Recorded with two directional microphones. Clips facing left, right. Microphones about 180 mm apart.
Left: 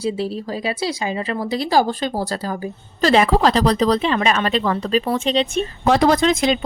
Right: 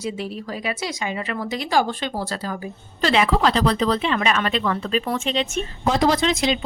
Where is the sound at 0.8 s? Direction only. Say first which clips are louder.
Left 4 dB; 30° left (ahead or behind).